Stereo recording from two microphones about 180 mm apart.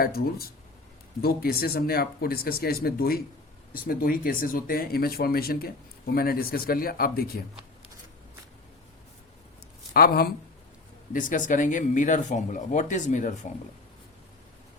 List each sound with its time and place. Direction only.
0.0 s speech: 55° left (ahead or behind)
9.9 s speech: 55° left (ahead or behind)
11.1 s speech: 45° left (ahead or behind)